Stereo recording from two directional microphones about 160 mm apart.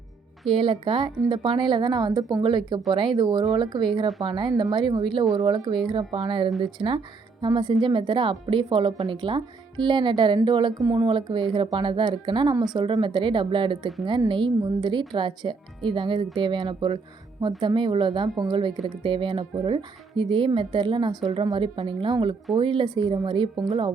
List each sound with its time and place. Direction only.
0.5 s speech: 35° right (ahead or behind)